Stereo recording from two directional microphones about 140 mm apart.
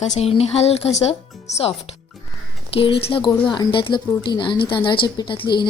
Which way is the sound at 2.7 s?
40° left (ahead or behind).